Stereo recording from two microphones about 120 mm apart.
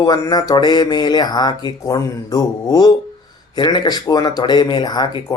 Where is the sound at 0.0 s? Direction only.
35° left (ahead or behind).